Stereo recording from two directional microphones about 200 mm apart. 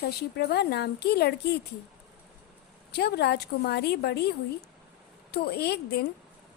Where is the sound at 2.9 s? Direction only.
55° left (ahead or behind).